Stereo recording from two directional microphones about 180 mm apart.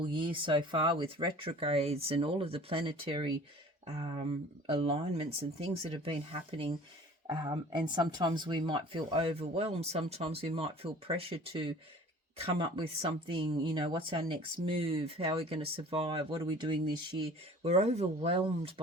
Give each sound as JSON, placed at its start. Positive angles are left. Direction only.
{"t": 0.0, "sound": "speech", "side_deg": -30}